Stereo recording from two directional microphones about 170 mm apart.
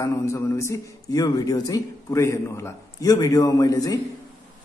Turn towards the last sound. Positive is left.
turn(degrees=20)  # may be behind; listen again after turning